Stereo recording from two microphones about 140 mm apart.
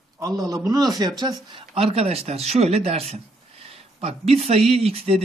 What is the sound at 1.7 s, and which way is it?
A man's voice, 45° right (ahead or behind).